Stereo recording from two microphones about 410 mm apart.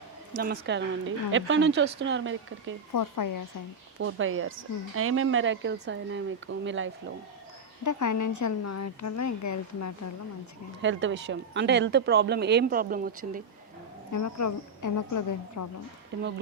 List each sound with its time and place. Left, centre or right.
0.3 s speech: right
2.9 s a woman's voice: left
4.0 s speech: right
7.9 s a woman's voice: left
10.8 s speech: right
14.1 s a woman's voice: left
16.1 s speech: right